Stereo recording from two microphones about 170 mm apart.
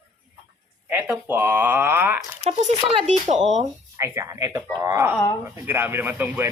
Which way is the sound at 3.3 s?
Centre (ahead or behind).